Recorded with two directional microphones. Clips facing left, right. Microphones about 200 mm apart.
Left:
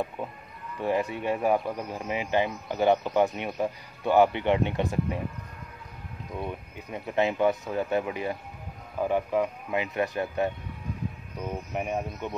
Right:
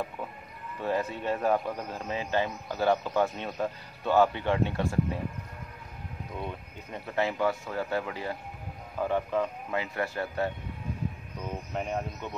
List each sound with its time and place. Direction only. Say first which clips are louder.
0.2 s a sound: left 3 dB; 20° left (ahead or behind)
0.7 s speech: left 3 dB; 15° left (ahead or behind)
6.4 s speech: left 3 dB; 15° left (ahead or behind)
11.7 s speech: left 1 dB; 15° left (ahead or behind)